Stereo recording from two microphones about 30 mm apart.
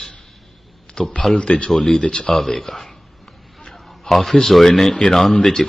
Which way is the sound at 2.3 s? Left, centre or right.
Centre.